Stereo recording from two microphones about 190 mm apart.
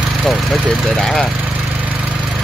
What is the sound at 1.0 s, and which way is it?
Speech, centre (ahead or behind).